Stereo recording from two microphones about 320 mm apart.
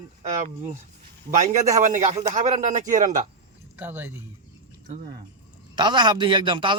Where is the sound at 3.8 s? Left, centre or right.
Centre.